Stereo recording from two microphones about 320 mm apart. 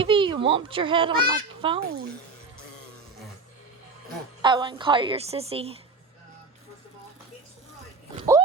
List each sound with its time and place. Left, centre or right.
0.0 s a woman's voice: centre
1.8 s speech: right
4.4 s a woman's voice: centre